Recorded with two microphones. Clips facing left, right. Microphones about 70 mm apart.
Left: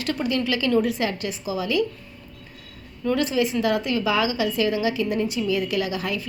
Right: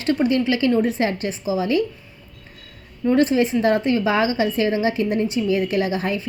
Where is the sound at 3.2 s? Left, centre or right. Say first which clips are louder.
Right 6 dB; right.